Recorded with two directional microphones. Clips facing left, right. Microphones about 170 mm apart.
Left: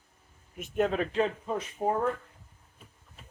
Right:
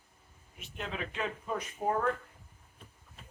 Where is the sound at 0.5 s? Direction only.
50° left (ahead or behind).